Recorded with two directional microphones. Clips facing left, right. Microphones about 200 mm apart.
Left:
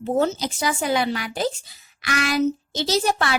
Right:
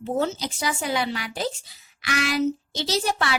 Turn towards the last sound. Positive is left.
turn(degrees=45)  # may be behind; listen again after turning